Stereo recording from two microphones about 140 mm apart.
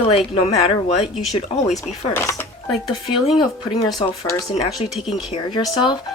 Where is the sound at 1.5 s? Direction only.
55° left (ahead or behind).